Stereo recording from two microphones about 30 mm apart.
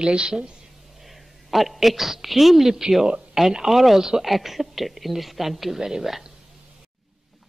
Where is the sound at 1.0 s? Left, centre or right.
Centre.